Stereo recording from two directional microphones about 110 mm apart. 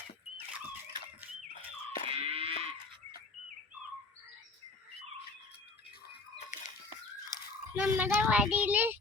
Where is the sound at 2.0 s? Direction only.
60° right (ahead or behind).